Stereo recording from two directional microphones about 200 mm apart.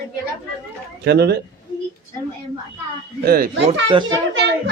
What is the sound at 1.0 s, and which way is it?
Speech, 55° right (ahead or behind).